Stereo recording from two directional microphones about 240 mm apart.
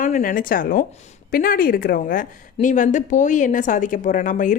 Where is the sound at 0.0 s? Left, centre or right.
Left.